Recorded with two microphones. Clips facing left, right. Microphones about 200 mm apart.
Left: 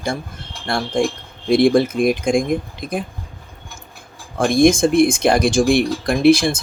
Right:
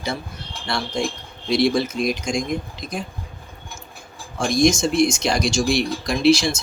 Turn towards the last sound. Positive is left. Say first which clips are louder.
# left 4 dB
turn(degrees=55)  # may be behind; listen again after turning